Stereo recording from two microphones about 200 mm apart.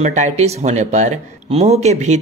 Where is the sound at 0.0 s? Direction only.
35° right (ahead or behind).